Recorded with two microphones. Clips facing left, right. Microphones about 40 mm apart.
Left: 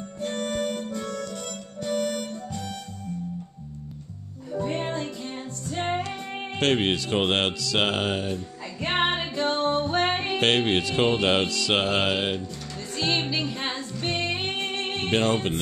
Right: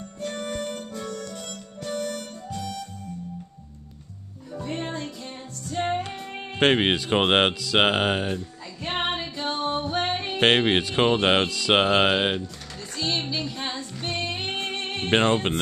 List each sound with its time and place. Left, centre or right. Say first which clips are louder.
0.3 s music: left 3 dB; centre
1.0 s music: left 2 dB; centre
2.0 s harmonica: left 3 dB; centre
4.5 s music: left 3 dB; centre
6.6 s speech: right 3 dB; right
8.8 s music: left 3 dB; left
9.3 s music: left 3 dB; left
10.4 s speech: right 4 dB; right
12.9 s speech: left 2 dB; left
13.4 s music: left 2 dB; left
15.0 s music: right 3 dB; right